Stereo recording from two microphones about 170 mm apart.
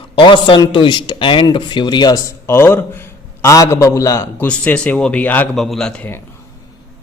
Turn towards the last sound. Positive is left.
turn(degrees=5)  # may be behind; listen again after turning